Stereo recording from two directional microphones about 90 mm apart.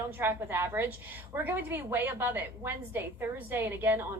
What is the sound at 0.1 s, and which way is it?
A woman's voice, 25° right (ahead or behind).